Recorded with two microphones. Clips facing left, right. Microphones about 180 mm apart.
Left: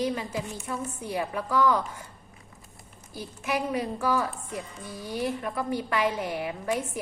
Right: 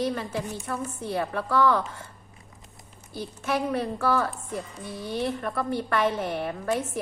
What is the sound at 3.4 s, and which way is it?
A woman's voice, 15° left (ahead or behind).